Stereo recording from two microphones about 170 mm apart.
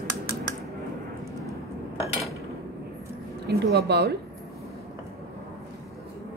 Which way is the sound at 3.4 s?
75° right (ahead or behind).